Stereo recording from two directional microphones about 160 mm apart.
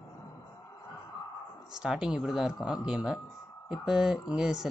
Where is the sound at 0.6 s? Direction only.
25° left (ahead or behind).